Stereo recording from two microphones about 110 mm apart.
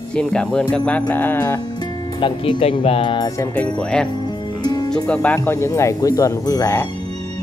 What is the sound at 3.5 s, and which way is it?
Speech, 10° left (ahead or behind).